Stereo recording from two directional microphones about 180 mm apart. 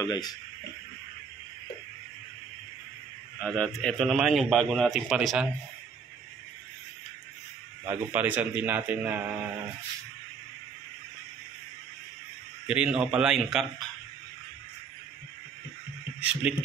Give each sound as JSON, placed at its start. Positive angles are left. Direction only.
{"t": 0.0, "sound": "speech", "side_deg": 20}
{"t": 3.4, "sound": "a man's voice", "side_deg": 5}
{"t": 7.9, "sound": "a man's voice", "side_deg": -10}
{"t": 12.6, "sound": "a man's voice", "side_deg": -5}
{"t": 16.2, "sound": "a man's voice", "side_deg": -5}